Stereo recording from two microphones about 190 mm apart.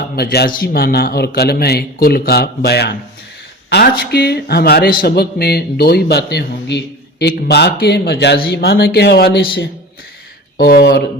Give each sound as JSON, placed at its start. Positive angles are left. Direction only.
{"t": 0.0, "sound": "a man's voice", "side_deg": 55}